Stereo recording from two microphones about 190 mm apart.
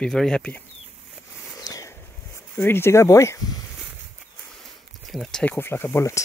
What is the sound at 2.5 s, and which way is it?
Speech, 10° left (ahead or behind).